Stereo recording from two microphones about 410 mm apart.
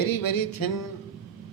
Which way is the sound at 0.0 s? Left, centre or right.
Left.